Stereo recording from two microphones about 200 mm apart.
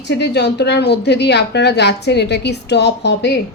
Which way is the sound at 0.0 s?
60° left (ahead or behind).